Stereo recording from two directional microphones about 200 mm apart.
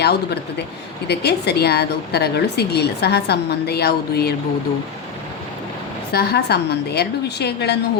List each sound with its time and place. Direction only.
1.0 s speech: 55° left (ahead or behind)
6.1 s speech: 55° left (ahead or behind)